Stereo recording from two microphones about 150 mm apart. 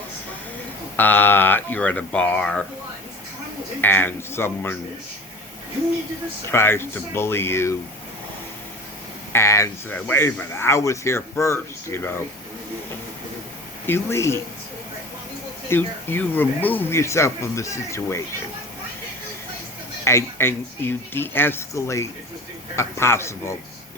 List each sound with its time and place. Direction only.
0.9 s speech: 10° left (ahead or behind)
3.8 s speech: 15° left (ahead or behind)
6.5 s speech: 15° left (ahead or behind)
9.3 s speech: 20° left (ahead or behind)
13.8 s speech: 15° left (ahead or behind)
15.7 s speech: 15° left (ahead or behind)
20.1 s speech: 15° left (ahead or behind)